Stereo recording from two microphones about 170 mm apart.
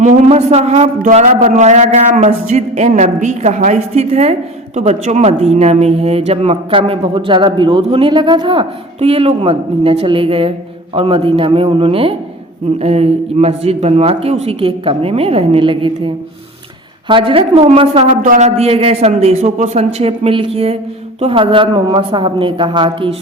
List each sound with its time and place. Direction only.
0.0 s a man's voice: 40° right (ahead or behind)
18.2 s a woman's voice: 45° right (ahead or behind); by 23.1 s 30° right (ahead or behind)